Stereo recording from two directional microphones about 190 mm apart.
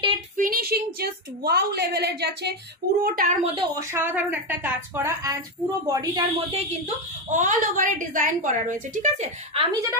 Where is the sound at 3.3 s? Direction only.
35° right (ahead or behind).